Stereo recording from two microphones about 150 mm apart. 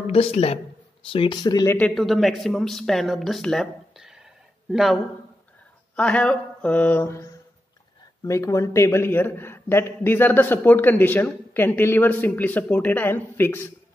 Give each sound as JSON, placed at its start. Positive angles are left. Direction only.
{"t": 0.0, "sound": "a woman's voice", "side_deg": 40}
{"t": 1.8, "sound": "speech", "side_deg": 5}
{"t": 5.9, "sound": "a man's voice", "side_deg": 10}